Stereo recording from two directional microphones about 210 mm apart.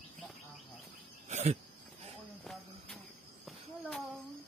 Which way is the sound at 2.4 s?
Centre (ahead or behind).